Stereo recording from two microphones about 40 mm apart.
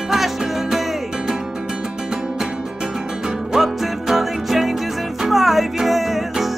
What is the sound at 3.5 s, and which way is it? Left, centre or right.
Music, centre.